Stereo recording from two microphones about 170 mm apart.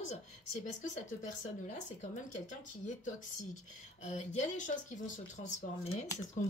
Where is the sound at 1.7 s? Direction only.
45° left (ahead or behind).